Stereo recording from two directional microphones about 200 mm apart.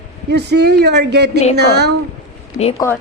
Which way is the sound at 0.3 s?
55° right (ahead or behind).